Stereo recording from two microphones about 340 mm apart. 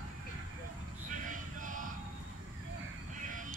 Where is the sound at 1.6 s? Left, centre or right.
Right.